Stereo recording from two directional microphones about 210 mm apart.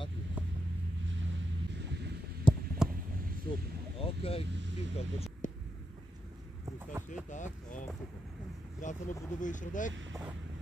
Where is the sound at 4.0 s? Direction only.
25° left (ahead or behind).